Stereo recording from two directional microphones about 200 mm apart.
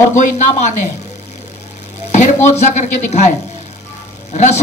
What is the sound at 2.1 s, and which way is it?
A man's voice, 35° left (ahead or behind).